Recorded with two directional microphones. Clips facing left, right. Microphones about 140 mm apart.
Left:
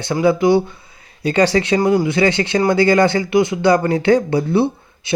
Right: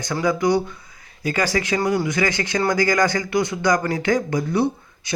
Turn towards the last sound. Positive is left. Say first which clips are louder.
# left 2 dB
turn(degrees=25)  # may be behind; listen again after turning